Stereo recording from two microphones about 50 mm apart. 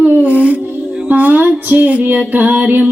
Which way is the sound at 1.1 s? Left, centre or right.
Right.